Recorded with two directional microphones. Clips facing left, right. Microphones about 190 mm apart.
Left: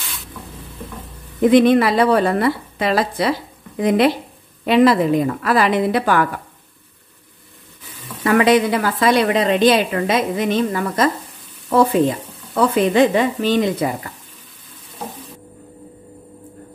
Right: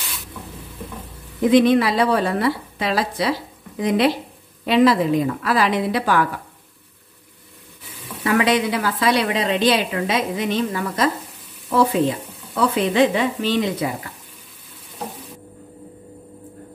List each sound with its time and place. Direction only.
1.5 s a woman's voice: 55° left (ahead or behind)
8.2 s a woman's voice: 50° left (ahead or behind)
12.5 s a woman's voice: 50° left (ahead or behind)